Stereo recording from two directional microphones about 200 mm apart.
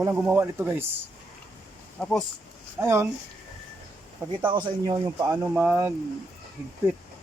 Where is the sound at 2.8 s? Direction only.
15° right (ahead or behind).